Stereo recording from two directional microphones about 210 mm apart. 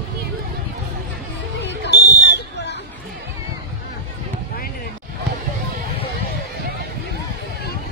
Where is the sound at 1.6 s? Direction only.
55° left (ahead or behind).